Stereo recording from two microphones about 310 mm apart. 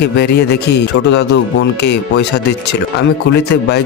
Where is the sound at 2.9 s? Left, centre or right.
Left.